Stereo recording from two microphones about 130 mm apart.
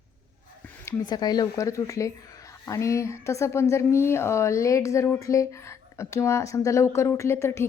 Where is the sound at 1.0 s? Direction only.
30° left (ahead or behind).